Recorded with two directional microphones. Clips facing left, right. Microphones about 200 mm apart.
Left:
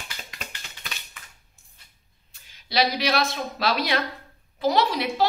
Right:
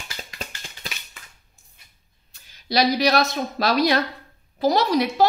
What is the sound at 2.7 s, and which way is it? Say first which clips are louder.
A woman's voice: right 4 dB; 40° right (ahead or behind).